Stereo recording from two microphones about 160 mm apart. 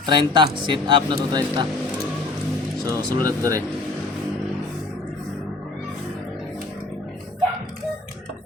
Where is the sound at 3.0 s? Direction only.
25° right (ahead or behind).